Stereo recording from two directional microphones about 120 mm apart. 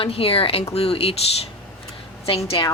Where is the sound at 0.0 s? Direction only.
50° left (ahead or behind).